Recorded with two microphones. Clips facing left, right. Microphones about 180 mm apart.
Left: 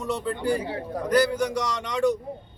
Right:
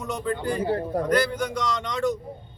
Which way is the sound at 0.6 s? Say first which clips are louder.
Right 5 dB; 50° right (ahead or behind).